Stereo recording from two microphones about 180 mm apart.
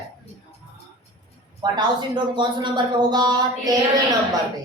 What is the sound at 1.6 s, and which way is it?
Speech, 25° right (ahead or behind).